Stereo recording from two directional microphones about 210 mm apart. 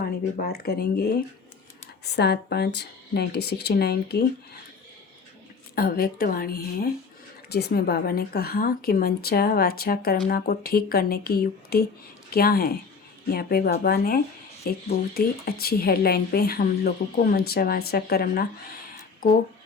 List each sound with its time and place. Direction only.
0.0 s a woman's voice: 45° left (ahead or behind)
5.7 s a woman's voice: 45° left (ahead or behind)